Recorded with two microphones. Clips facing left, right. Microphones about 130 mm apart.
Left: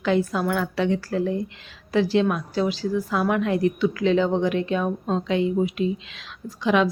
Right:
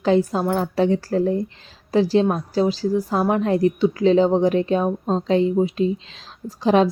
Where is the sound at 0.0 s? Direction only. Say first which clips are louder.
Right 4 dB; 35° right (ahead or behind).